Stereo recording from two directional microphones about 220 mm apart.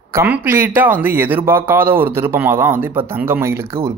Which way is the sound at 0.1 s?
10° right (ahead or behind).